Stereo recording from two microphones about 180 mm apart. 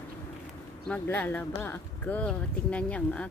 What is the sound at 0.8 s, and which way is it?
Speech, 10° left (ahead or behind).